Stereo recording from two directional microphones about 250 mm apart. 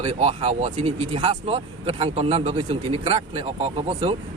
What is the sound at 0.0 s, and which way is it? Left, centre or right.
Speech, right.